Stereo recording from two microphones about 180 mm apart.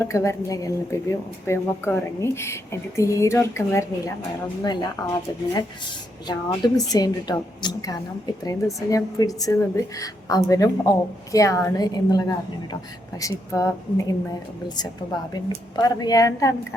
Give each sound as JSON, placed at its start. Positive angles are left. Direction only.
{"t": 0.0, "sound": "a woman's voice", "side_deg": 15}
{"t": 6.2, "sound": "a woman's voice", "side_deg": 20}
{"t": 15.3, "sound": "a woman's voice", "side_deg": 20}